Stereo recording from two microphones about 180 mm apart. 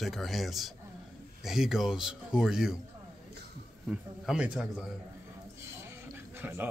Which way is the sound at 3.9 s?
5° right (ahead or behind).